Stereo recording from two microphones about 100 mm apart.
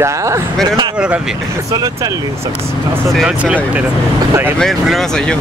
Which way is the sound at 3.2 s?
15° right (ahead or behind).